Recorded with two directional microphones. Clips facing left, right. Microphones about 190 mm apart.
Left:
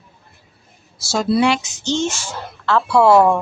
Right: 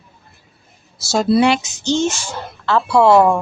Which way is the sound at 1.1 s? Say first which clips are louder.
Right 3 dB; 25° right (ahead or behind).